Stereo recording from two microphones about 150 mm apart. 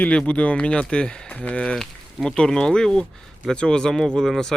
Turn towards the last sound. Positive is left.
turn(degrees=5)  # may be behind; listen again after turning